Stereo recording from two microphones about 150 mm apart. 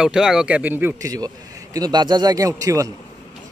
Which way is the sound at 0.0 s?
5° right (ahead or behind).